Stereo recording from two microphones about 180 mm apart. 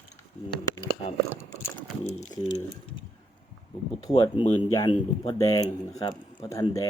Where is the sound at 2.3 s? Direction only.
20° left (ahead or behind).